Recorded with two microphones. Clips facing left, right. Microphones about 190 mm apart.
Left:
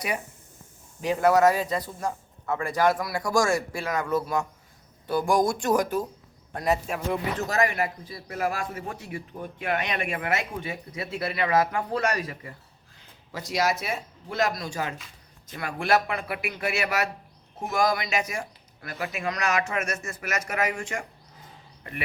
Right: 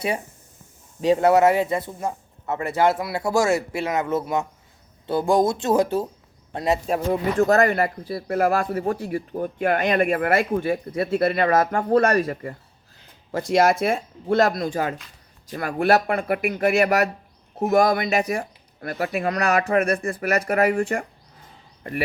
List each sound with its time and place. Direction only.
1.0 s speech: 25° right (ahead or behind)
7.4 s speech: 60° right (ahead or behind)
8.9 s speech: 35° right (ahead or behind)
17.7 s speech: 60° right (ahead or behind); by 21.0 s 35° right (ahead or behind)